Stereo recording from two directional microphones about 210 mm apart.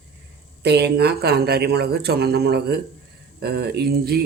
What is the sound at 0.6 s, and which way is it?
Speech, 50° right (ahead or behind).